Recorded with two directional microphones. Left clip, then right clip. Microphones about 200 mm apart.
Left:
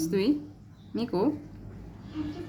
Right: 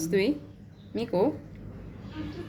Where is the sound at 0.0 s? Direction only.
10° left (ahead or behind).